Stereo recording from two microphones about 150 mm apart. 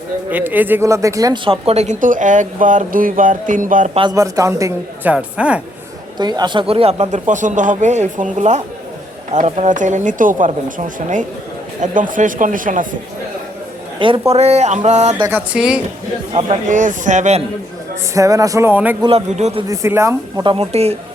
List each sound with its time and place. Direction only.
0.3 s speech: 10° right (ahead or behind)
1.5 s speech: 45° right (ahead or behind); by 3.9 s 60° right (ahead or behind)
4.1 s speech: 20° right (ahead or behind)
5.1 s speech: 5° right (ahead or behind)
6.1 s speech: 30° right (ahead or behind); by 13.0 s 65° right (ahead or behind)
14.0 s speech: 40° right (ahead or behind)
15.3 s speech: 5° right (ahead or behind)
16.3 s speech: 45° right (ahead or behind)
18.1 s speech: 20° right (ahead or behind)
19.0 s speech: 45° right (ahead or behind)
19.6 s speech: 20° right (ahead or behind)
20.4 s speech: 40° right (ahead or behind)